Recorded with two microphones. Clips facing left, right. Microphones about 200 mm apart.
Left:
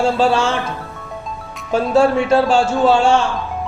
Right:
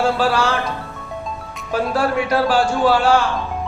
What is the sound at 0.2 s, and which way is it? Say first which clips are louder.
Speech: left 3 dB; 25° left (ahead or behind).